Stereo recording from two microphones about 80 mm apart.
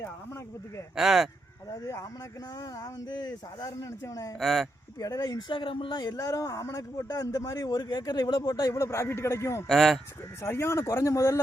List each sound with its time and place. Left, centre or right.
0.9 s speech: centre
2.8 s speech: left
3.8 s a man's voice: left
4.4 s speech: centre
4.9 s a man's voice: left
5.5 s speech: left
6.1 s a man's voice: left
8.8 s speech: left
9.6 s speech: centre
10.4 s speech: left